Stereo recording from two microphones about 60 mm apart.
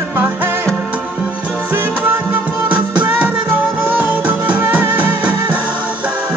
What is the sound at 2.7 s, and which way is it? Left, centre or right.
Music, right.